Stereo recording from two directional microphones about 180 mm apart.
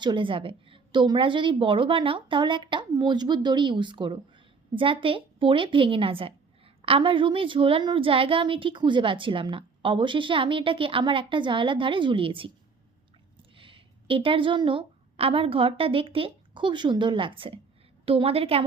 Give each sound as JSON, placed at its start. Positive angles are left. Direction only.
{"t": 0.0, "sound": "a woman's voice", "side_deg": -25}
{"t": 13.6, "sound": "a woman's voice", "side_deg": -30}